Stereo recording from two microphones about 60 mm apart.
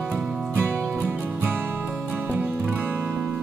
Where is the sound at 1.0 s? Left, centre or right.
Right.